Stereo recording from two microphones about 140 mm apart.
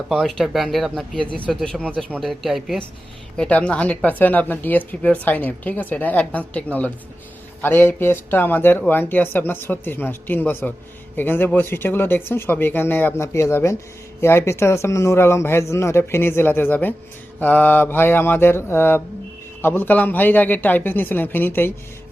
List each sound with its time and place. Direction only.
0.1 s speech: centre (ahead or behind)